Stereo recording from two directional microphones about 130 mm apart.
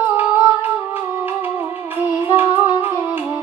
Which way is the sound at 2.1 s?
15° right (ahead or behind).